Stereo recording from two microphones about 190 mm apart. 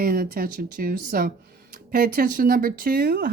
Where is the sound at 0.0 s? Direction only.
50° right (ahead or behind).